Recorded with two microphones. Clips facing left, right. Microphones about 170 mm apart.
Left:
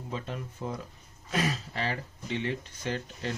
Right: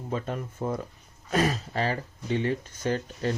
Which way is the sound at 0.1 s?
50° right (ahead or behind).